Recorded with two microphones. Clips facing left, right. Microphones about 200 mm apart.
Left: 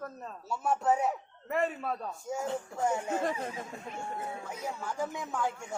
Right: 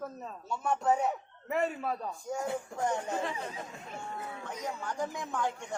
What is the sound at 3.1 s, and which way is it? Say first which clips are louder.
Speech: left 3 dB; 45° left (ahead or behind).